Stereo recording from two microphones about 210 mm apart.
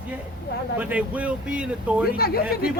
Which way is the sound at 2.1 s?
45° left (ahead or behind).